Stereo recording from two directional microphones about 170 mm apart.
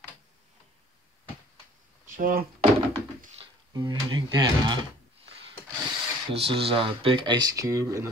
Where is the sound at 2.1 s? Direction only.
55° right (ahead or behind).